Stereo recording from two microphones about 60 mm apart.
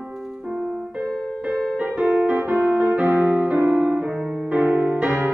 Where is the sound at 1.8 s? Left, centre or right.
Right.